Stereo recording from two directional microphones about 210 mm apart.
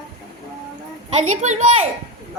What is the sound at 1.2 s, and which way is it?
Speech, 35° right (ahead or behind).